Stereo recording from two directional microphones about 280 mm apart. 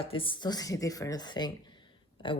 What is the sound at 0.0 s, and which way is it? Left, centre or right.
A woman's voice, centre.